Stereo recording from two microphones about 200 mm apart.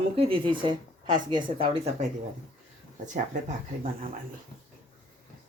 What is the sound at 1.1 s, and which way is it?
Speech, 25° right (ahead or behind).